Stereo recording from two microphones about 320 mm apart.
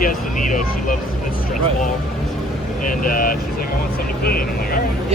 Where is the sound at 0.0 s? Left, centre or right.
Left.